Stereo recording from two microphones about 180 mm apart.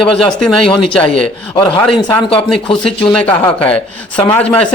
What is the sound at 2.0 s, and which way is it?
Speech, 25° left (ahead or behind).